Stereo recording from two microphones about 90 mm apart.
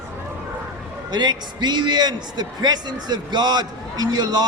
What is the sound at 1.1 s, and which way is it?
A man's voice, 55° right (ahead or behind).